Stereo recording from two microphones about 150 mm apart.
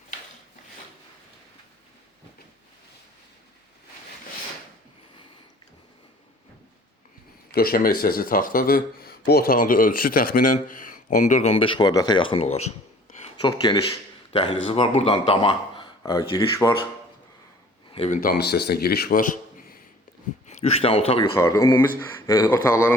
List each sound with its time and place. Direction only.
7.5 s speech: 90° left; by 12.7 s 45° left (ahead or behind)
13.4 s a man's voice: 30° left (ahead or behind)
16.0 s speech: 20° left (ahead or behind)
18.1 s a man's voice: 75° left (ahead or behind)
20.5 s speech: 45° left (ahead or behind)
21.3 s speech: 20° left (ahead or behind)